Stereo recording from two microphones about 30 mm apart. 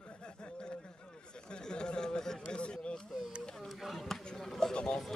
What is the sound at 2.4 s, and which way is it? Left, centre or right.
Speech, left.